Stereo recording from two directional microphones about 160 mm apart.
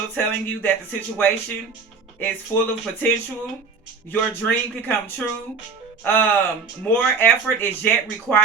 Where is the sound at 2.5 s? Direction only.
15° left (ahead or behind).